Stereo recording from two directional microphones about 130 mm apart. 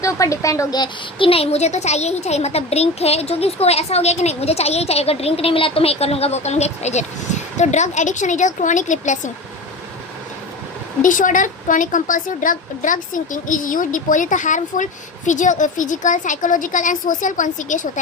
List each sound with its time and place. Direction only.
0.0 s a woman's voice: 25° left (ahead or behind); by 9.3 s 70° left (ahead or behind)
11.0 s a woman's voice: 85° left